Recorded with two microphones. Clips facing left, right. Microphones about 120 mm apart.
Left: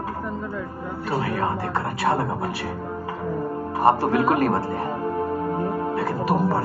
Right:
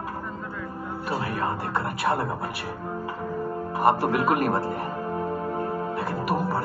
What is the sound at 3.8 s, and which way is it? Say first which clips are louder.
Speech: left 3 dB; 30° left (ahead or behind).